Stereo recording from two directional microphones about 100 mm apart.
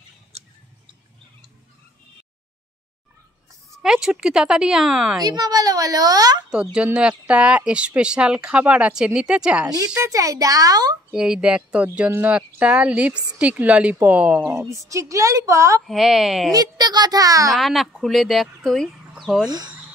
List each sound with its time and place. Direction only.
3.7 s speech: 5° right (ahead or behind)
5.2 s speech: 40° right (ahead or behind)
6.5 s speech: 10° right (ahead or behind)
9.9 s speech: 35° right (ahead or behind)
11.1 s speech: 10° right (ahead or behind)
14.4 s speech: 30° right (ahead or behind)
15.9 s a woman's voice: centre (ahead or behind)
16.5 s speech: 45° right (ahead or behind)
17.5 s speech: centre (ahead or behind)